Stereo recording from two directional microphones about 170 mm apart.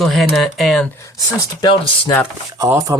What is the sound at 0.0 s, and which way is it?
Speech, centre (ahead or behind).